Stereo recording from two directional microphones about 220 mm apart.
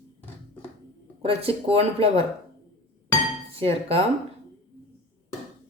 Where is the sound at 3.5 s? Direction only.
25° right (ahead or behind).